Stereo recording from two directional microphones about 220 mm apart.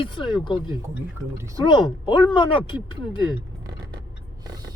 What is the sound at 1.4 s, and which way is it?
Speech, 15° right (ahead or behind).